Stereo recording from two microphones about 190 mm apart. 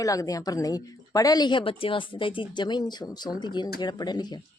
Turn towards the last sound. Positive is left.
turn(degrees=20)  # may be behind; listen again after turning